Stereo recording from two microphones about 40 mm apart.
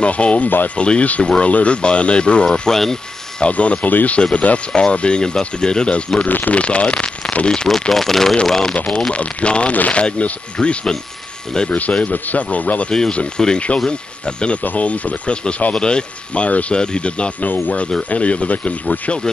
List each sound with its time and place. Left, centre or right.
0.0 s speech: left
1.2 s speech: left
2.7 s speech: centre
3.3 s speech: left
6.2 s speech: left
6.5 s speech: left
7.9 s speech: centre
8.7 s speech: left
12.1 s speech: left
13.4 s speech: centre
16.4 s speech: left
16.7 s speech: left
17.4 s speech: left